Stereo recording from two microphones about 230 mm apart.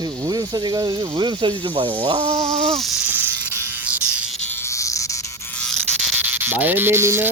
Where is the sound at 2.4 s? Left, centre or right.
Centre.